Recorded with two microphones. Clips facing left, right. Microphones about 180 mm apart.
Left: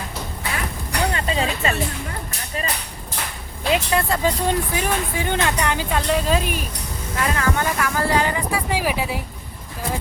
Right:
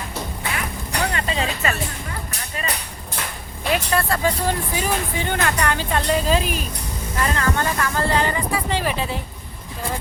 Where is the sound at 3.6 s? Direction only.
20° left (ahead or behind).